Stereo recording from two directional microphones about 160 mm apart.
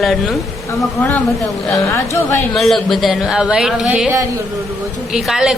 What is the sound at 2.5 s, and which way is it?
Speech, centre (ahead or behind).